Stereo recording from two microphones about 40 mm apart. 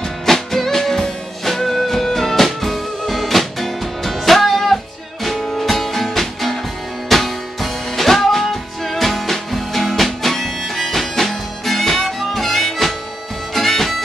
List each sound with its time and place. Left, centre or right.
0.3 s music: centre